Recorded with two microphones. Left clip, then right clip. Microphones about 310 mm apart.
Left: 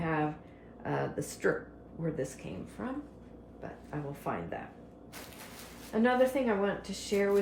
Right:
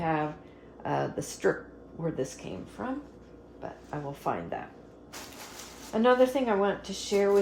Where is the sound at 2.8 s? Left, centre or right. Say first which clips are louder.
Right 5 dB; centre.